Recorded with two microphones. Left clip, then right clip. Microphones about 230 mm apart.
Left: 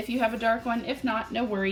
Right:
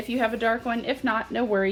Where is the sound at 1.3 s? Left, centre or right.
Centre.